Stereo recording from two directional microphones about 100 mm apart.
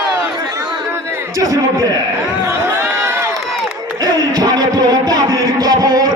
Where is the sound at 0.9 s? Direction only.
25° right (ahead or behind).